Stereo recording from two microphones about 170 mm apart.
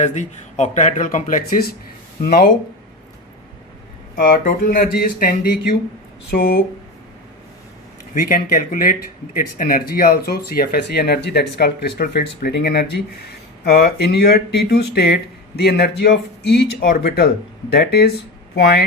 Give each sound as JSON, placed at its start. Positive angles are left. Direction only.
{"t": 0.0, "sound": "speech", "side_deg": 45}
{"t": 4.1, "sound": "speech", "side_deg": 60}
{"t": 8.1, "sound": "speech", "side_deg": 55}